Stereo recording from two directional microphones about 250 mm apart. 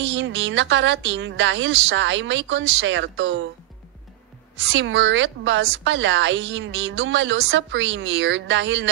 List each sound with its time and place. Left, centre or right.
0.0 s a woman's voice: right
4.6 s a woman's voice: right